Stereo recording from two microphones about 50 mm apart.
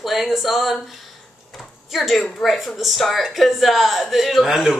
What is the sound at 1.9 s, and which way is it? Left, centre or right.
A woman's voice, centre.